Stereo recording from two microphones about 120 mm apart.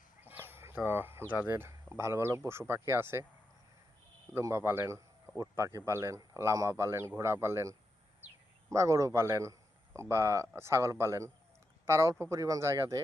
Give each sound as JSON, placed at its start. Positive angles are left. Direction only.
{"t": 0.2, "sound": "a sound", "side_deg": -15}
{"t": 0.9, "sound": "a man's voice", "side_deg": -20}
{"t": 4.4, "sound": "a man's voice", "side_deg": -20}